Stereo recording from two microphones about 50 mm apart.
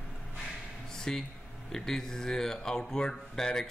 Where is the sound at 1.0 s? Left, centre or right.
Centre.